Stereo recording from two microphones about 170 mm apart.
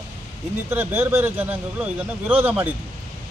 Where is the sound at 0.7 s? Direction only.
15° right (ahead or behind).